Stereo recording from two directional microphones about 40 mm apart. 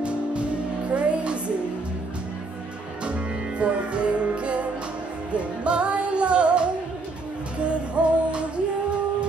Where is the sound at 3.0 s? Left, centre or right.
Right.